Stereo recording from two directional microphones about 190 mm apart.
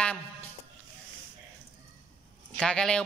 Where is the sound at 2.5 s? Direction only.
5° left (ahead or behind).